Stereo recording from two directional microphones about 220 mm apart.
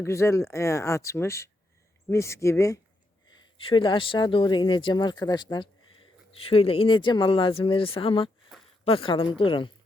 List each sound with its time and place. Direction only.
0.0 s speech: 10° left (ahead or behind)